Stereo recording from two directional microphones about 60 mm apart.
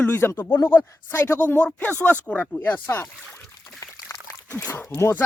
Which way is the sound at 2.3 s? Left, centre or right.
Left.